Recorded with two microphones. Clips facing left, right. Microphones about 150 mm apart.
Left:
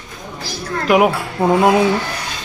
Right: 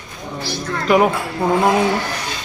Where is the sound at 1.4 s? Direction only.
20° left (ahead or behind).